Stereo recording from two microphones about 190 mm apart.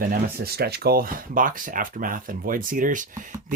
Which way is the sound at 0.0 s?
50° right (ahead or behind).